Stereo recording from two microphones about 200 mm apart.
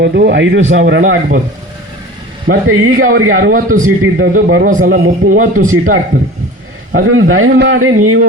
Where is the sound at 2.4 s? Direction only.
80° right.